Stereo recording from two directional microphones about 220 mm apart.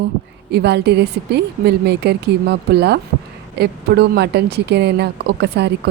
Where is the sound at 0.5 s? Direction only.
50° right (ahead or behind).